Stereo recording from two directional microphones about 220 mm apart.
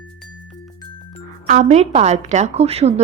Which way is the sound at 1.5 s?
35° right (ahead or behind).